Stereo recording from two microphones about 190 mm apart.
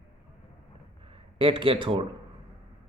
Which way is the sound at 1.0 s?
30° right (ahead or behind).